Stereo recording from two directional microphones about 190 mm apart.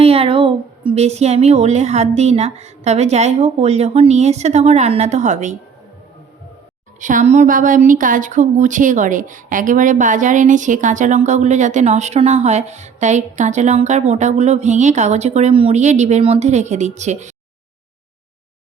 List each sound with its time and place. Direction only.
0.0 s speech: 30° right (ahead or behind)
7.0 s speech: 40° right (ahead or behind)